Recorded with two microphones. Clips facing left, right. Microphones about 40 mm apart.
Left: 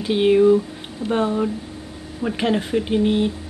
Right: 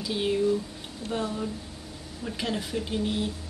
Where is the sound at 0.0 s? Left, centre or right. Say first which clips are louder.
Left 11 dB; left.